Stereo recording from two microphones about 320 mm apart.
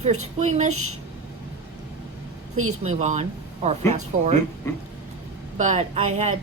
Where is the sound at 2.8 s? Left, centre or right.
Right.